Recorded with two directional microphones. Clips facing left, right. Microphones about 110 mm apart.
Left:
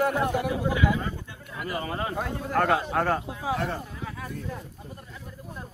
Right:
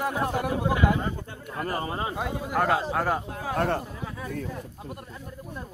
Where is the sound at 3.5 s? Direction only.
55° right (ahead or behind).